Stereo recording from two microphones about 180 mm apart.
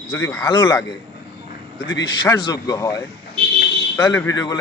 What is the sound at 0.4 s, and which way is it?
Speech, 25° left (ahead or behind).